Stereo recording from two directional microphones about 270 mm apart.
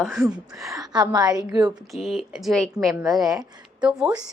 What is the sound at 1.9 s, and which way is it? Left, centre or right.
A woman's voice, centre.